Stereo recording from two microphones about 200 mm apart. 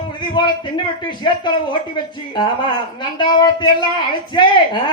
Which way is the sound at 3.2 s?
25° left (ahead or behind).